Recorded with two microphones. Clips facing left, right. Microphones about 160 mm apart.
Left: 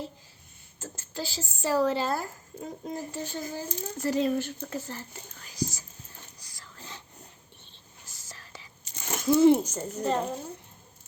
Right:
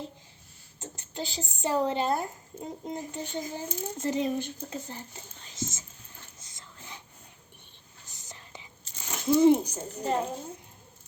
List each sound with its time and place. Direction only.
0.8 s speech: 20° right (ahead or behind)
6.3 s whispering: 20° right (ahead or behind)
8.0 s whispering: 20° right (ahead or behind)
9.2 s a child's voice: 15° right (ahead or behind)